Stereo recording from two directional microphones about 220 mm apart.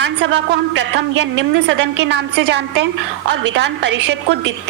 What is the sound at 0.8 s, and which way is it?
A woman's voice, 55° right (ahead or behind).